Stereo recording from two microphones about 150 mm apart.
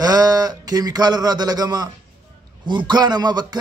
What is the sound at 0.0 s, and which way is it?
Speech, 25° right (ahead or behind).